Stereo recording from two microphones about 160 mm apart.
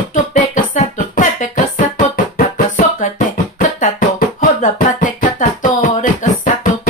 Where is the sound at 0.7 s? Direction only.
50° left (ahead or behind).